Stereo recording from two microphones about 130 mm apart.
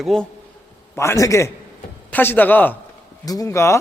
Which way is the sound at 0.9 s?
20° left (ahead or behind).